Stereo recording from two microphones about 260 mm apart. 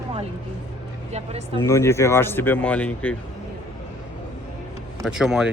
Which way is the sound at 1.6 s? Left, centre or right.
Centre.